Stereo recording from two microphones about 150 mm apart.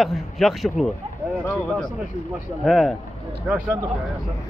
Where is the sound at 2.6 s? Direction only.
Centre (ahead or behind).